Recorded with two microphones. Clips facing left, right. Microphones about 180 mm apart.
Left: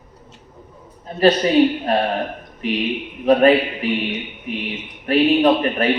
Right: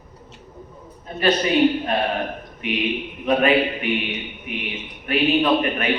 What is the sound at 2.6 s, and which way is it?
Speech, 35° left (ahead or behind).